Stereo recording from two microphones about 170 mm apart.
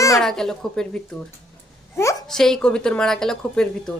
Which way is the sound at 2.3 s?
5° left (ahead or behind).